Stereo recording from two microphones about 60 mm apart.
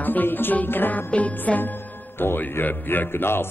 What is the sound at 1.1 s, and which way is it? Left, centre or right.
Music, left.